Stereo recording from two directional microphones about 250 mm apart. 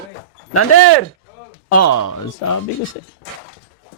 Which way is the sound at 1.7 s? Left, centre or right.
Left.